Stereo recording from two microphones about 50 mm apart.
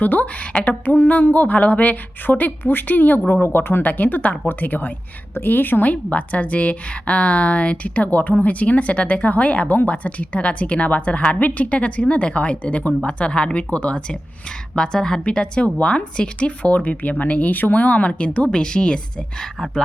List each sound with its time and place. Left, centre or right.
0.0 s a woman's voice: left
0.9 s a woman's voice: left
3.8 s a woman's voice: left
14.8 s a woman's voice: centre
19.4 s speech: centre